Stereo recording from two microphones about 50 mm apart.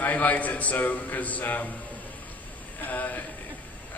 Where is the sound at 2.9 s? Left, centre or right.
Left.